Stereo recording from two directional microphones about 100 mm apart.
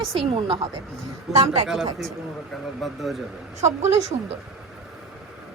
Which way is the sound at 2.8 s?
Centre (ahead or behind).